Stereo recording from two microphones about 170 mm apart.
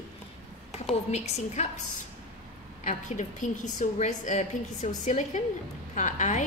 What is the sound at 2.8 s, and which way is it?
A woman's voice, 45° left (ahead or behind).